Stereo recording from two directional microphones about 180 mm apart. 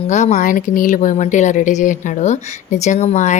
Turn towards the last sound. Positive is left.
turn(degrees=40)  # may be behind; listen again after turning